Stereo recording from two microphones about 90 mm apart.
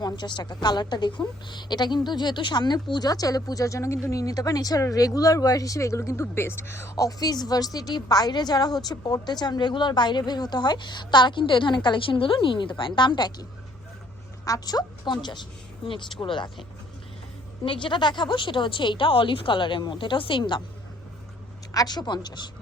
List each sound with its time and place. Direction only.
0.0 s a woman's voice: 55° left (ahead or behind); by 6.9 s 30° left (ahead or behind)
6.9 s a woman's voice: 45° left (ahead or behind)
14.4 s a woman's voice: 45° left (ahead or behind); by 16.5 s 65° left (ahead or behind)
17.6 s a woman's voice: 65° left (ahead or behind)
21.7 s a woman's voice: 45° left (ahead or behind)